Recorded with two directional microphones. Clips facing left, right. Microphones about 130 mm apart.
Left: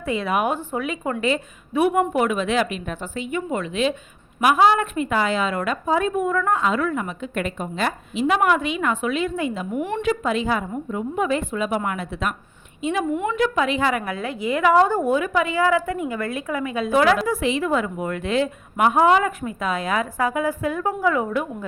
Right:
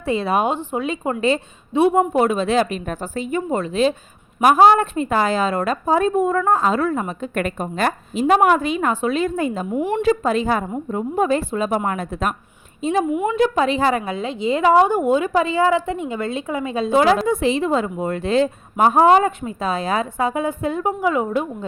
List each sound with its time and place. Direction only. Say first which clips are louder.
0.0 s a woman's voice: right 3 dB; 30° right (ahead or behind)